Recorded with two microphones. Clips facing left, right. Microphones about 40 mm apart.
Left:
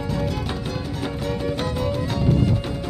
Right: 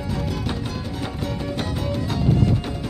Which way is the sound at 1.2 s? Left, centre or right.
Centre.